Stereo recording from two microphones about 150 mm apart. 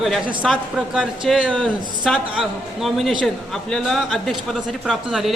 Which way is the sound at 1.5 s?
5° left (ahead or behind).